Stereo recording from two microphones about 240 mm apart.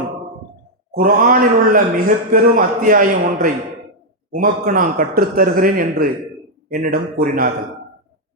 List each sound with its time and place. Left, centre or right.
0.9 s a man's voice: right